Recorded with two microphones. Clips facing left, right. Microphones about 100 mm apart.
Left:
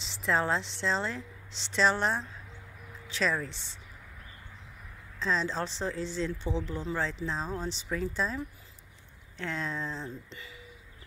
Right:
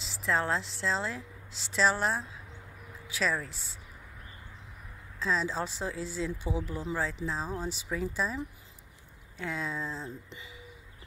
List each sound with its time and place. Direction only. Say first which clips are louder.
0.0 s a woman's voice: left 1 dB; centre (ahead or behind)
5.2 s speech: even; 5° right (ahead or behind)
9.4 s speech: even; 5° right (ahead or behind)
10.3 s speech: left 1 dB; 15° right (ahead or behind)